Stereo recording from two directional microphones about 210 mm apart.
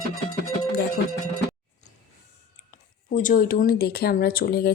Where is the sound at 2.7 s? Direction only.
40° left (ahead or behind).